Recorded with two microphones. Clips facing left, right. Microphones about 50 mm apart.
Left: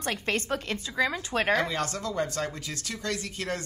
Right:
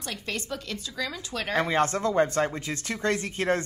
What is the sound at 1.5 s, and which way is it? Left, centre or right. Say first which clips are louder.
Speech: right 8 dB; right.